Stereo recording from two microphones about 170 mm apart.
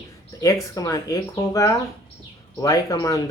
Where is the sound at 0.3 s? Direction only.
20° left (ahead or behind).